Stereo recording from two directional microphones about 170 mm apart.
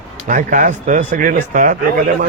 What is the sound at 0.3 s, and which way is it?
Speech, 50° right (ahead or behind).